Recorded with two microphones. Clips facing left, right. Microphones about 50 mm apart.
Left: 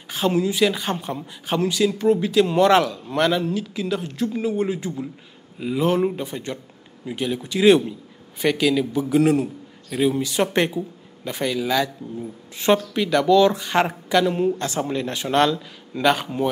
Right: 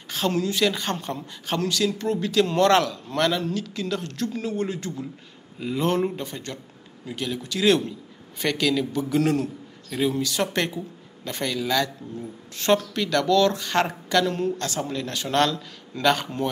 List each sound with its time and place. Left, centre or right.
0.1 s a man's voice: centre